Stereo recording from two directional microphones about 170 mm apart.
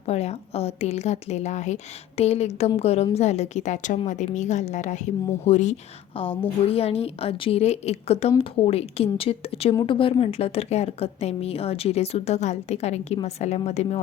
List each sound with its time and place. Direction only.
0.0 s a woman's voice: 40° left (ahead or behind)